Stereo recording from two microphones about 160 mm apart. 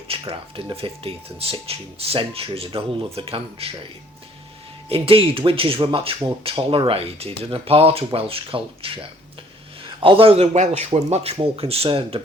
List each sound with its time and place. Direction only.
0.1 s speech: 35° right (ahead or behind)
4.9 s speech: 35° right (ahead or behind)